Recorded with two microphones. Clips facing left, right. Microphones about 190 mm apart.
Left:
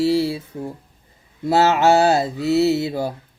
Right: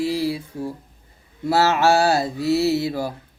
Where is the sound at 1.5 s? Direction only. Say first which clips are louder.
Left 2 dB; 20° left (ahead or behind).